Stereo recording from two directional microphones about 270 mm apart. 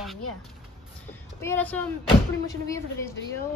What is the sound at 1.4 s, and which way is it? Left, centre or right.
A woman's voice, centre.